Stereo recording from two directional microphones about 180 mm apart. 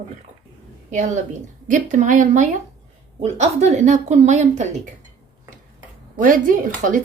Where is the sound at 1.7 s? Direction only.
45° right (ahead or behind).